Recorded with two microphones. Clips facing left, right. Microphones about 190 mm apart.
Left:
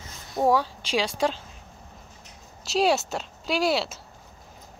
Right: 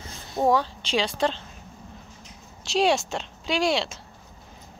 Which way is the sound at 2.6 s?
5° left (ahead or behind).